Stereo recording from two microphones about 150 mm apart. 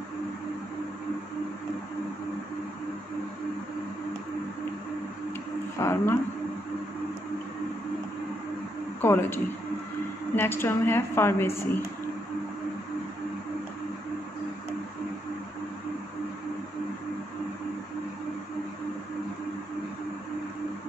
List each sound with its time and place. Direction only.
5.8 s speech: 20° left (ahead or behind)
9.0 s a woman's voice: 15° left (ahead or behind)